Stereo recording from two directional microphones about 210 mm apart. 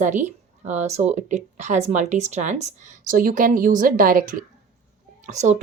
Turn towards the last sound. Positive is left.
turn(degrees=-35)  # may be behind; listen again after turning